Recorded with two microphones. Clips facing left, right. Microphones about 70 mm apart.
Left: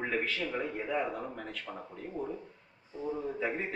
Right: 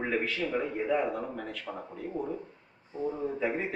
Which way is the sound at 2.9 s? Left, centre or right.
Right.